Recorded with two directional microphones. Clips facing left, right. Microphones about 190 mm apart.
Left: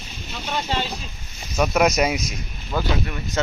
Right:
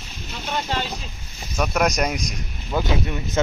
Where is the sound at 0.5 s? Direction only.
10° left (ahead or behind).